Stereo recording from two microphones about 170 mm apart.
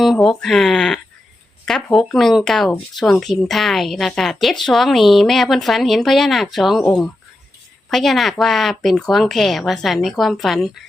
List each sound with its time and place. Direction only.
0.0 s speech: centre (ahead or behind)